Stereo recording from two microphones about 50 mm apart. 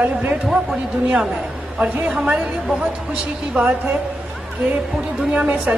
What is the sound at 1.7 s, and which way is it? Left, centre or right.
Speech, right.